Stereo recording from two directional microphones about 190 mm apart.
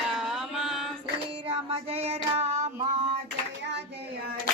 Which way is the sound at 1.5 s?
30° right (ahead or behind).